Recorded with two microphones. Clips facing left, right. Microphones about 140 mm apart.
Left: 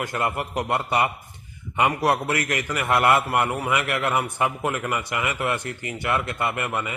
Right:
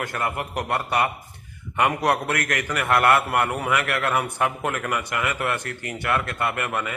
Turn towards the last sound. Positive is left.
turn(degrees=5)  # may be behind; listen again after turning